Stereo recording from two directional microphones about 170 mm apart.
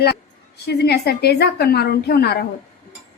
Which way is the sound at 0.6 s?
75° left (ahead or behind).